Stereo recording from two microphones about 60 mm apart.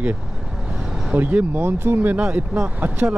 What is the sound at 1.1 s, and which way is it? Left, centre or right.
Speech, right.